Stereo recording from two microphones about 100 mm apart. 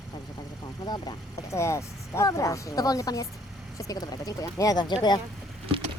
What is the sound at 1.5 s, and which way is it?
Speech, 30° left (ahead or behind).